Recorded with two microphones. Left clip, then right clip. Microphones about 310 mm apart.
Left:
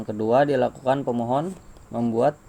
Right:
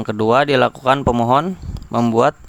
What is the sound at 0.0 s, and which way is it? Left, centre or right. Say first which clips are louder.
A man's voice: right 5 dB; right.